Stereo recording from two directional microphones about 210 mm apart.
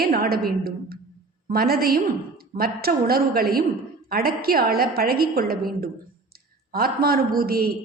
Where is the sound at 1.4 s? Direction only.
45° right (ahead or behind).